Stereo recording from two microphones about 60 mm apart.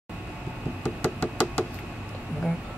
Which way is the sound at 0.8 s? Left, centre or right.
Left.